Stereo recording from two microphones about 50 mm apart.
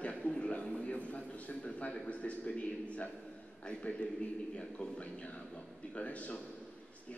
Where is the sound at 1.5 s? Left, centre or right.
Left.